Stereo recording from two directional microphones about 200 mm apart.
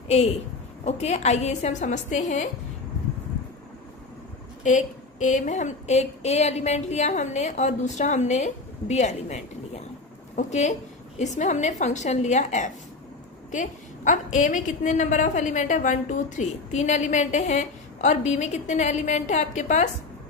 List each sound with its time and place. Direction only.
0.8 s a woman's voice: 35° left (ahead or behind)
4.6 s a woman's voice: 35° left (ahead or behind)